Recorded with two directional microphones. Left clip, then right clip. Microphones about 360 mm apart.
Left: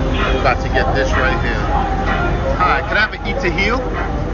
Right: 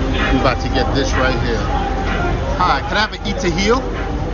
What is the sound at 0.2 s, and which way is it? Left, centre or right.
Vehicle, centre.